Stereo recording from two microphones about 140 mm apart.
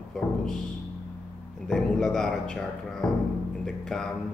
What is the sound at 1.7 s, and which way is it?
Speech, 5° left (ahead or behind).